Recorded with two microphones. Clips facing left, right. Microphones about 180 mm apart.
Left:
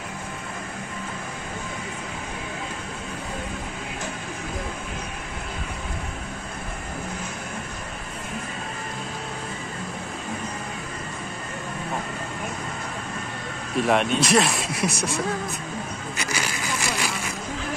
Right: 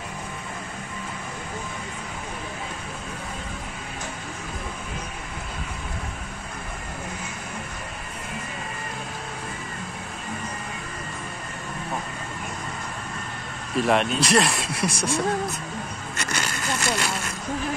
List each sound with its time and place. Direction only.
13.7 s speech: centre (ahead or behind)
14.9 s speech: 30° right (ahead or behind)
16.2 s a sound: centre (ahead or behind)